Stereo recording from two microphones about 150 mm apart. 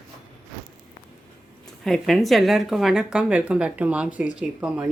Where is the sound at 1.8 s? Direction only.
Centre (ahead or behind).